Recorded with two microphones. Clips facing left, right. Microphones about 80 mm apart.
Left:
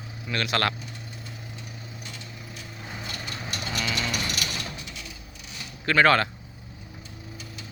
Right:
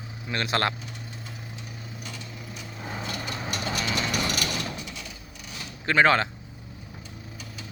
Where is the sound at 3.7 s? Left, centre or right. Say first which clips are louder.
Even; right.